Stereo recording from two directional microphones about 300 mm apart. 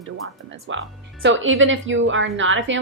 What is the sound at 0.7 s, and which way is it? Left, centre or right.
A woman's voice, right.